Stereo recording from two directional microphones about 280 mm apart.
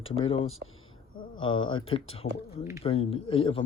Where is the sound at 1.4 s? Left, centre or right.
Centre.